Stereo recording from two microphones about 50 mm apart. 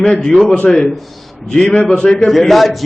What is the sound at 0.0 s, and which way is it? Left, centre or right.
A man's voice, centre.